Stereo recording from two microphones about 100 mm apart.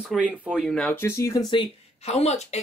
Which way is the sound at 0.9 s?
25° left (ahead or behind).